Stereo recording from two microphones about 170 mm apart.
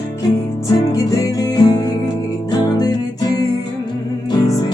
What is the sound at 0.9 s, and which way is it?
Music, 20° left (ahead or behind).